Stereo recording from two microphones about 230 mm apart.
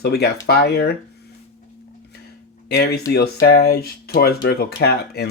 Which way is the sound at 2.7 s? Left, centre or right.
Left.